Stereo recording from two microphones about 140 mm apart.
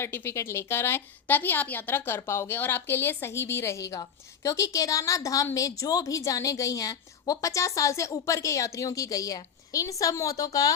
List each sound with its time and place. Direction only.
0.0 s a woman's voice: 15° left (ahead or behind)